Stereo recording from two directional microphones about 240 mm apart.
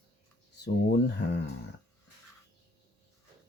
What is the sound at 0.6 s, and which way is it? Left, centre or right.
Speech, left.